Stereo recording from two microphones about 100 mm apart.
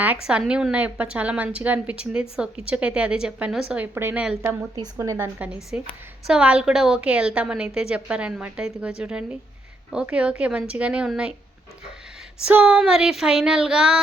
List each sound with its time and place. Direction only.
0.0 s a woman's voice: 10° right (ahead or behind)
4.7 s speech: 35° right (ahead or behind)
5.1 s a woman's voice: 15° right (ahead or behind)
12.5 s a woman's voice: 10° right (ahead or behind)